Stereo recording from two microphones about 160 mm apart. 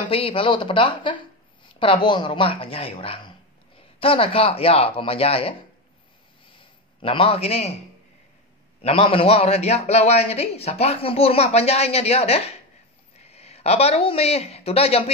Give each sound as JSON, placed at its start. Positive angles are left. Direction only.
{"t": 0.1, "sound": "a man's voice", "side_deg": 35}
{"t": 7.0, "sound": "a man's voice", "side_deg": 35}
{"t": 8.8, "sound": "a man's voice", "side_deg": 35}